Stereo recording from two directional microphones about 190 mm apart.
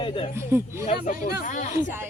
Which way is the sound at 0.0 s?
25° left (ahead or behind).